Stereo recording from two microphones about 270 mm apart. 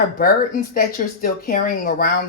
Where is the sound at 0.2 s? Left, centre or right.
Left.